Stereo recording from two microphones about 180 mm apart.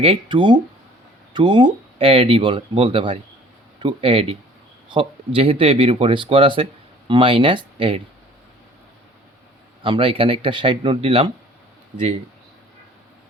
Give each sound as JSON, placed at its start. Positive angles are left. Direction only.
{"t": 0.0, "sound": "speech", "side_deg": -30}
{"t": 9.8, "sound": "speech", "side_deg": -30}